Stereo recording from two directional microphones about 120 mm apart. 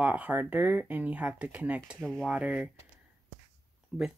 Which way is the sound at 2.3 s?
10° right (ahead or behind).